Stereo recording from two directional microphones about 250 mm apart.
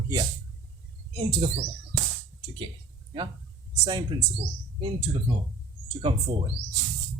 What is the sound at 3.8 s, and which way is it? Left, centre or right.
Speech, centre.